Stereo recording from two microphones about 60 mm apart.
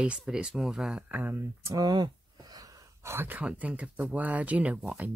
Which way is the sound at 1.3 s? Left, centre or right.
Right.